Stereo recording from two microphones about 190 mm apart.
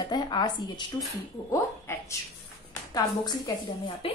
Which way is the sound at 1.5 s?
15° left (ahead or behind).